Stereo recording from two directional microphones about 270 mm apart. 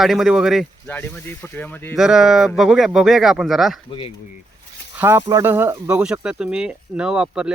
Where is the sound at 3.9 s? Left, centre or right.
Centre.